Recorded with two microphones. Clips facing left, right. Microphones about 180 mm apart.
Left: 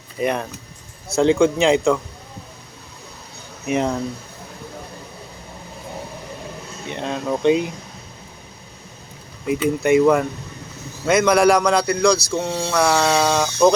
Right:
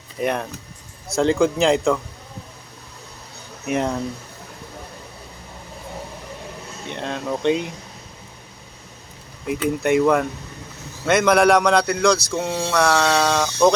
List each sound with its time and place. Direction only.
0.2 s speech: centre (ahead or behind)
3.7 s speech: centre (ahead or behind)
6.9 s speech: 5° left (ahead or behind)
9.5 s speech: centre (ahead or behind)